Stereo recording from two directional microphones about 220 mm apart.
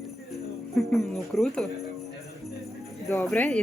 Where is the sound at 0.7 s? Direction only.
Centre (ahead or behind).